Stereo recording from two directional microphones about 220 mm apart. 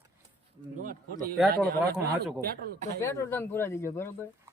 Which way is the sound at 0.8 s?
40° right (ahead or behind).